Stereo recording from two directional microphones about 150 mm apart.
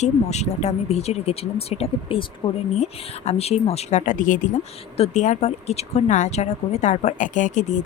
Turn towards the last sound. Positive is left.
turn(degrees=55)  # may be behind; listen again after turning